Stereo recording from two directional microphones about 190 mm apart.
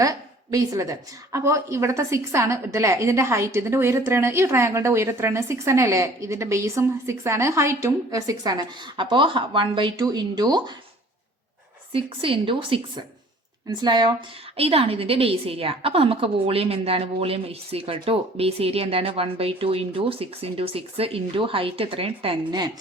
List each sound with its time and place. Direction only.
0.0 s a woman's voice: 20° right (ahead or behind)
11.9 s a woman's voice: 30° right (ahead or behind)